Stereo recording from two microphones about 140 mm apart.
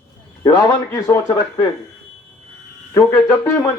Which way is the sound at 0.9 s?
20° left (ahead or behind).